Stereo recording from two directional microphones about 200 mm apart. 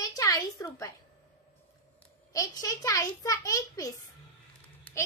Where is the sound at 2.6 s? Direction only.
15° left (ahead or behind).